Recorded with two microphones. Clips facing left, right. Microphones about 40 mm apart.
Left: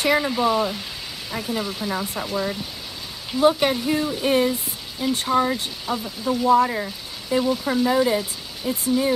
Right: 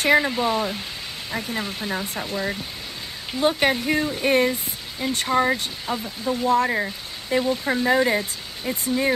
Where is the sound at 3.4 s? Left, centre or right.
Right; by 5.5 s centre.